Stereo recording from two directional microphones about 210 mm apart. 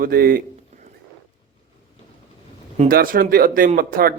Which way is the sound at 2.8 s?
40° right (ahead or behind).